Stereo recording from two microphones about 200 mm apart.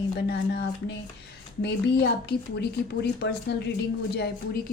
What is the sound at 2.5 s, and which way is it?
A woman's voice, 55° left (ahead or behind).